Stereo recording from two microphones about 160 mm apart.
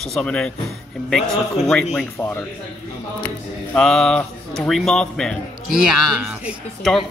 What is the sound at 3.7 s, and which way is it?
A man's voice, 5° left (ahead or behind).